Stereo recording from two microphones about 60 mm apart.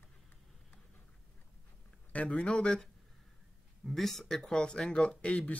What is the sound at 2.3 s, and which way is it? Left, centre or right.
Speech, centre.